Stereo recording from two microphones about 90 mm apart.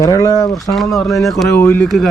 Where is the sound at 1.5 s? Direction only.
25° left (ahead or behind).